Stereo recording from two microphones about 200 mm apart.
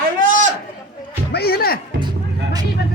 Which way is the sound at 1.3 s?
50° left (ahead or behind).